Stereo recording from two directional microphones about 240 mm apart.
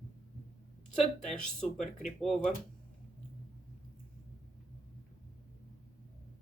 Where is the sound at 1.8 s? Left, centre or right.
Left.